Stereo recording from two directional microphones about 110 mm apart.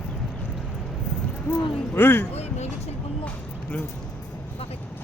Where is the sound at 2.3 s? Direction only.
80° left.